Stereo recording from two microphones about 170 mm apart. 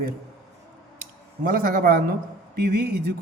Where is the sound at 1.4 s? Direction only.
60° right (ahead or behind).